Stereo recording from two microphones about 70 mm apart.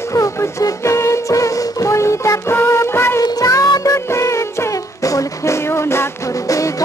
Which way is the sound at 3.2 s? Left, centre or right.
Left.